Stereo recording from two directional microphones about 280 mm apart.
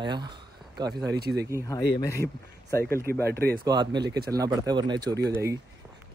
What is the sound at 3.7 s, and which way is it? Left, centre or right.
Speech, centre.